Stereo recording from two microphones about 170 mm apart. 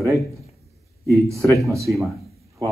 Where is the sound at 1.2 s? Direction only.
15° right (ahead or behind).